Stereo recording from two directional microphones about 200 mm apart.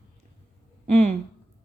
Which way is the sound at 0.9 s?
30° right (ahead or behind).